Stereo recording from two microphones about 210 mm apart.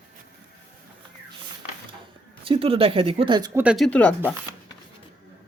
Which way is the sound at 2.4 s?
25° right (ahead or behind).